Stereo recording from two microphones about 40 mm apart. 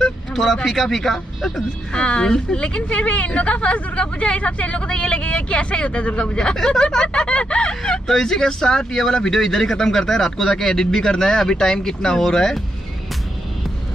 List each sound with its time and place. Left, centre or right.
0.0 s speech: centre
2.0 s speech: left
8.1 s speech: centre